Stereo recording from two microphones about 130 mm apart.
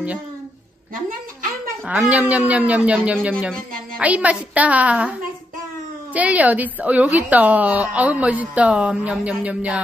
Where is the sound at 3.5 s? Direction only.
90° right.